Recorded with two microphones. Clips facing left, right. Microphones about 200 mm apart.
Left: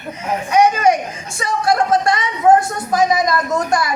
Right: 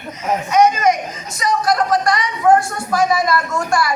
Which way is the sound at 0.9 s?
30° left (ahead or behind).